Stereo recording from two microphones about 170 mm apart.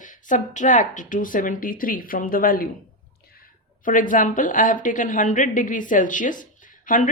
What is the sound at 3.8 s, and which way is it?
Speech, 50° left (ahead or behind).